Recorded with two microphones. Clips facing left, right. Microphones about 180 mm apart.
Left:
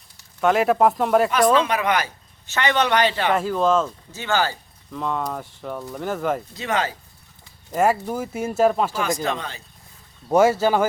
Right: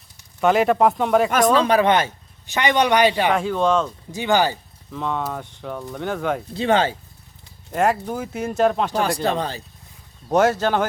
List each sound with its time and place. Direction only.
0.3 s speech: centre (ahead or behind)
1.5 s speech: 35° right (ahead or behind)
2.5 s speech: 15° right (ahead or behind)
3.3 s speech: 5° left (ahead or behind)
4.1 s speech: 15° right (ahead or behind)
4.9 s speech: centre (ahead or behind)
6.5 s speech: 30° right (ahead or behind)
7.7 s speech: 5° left (ahead or behind)
9.0 s speech: 35° right (ahead or behind)
10.2 s speech: 10° left (ahead or behind)